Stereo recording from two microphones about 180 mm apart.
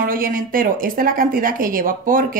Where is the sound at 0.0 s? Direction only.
50° right (ahead or behind).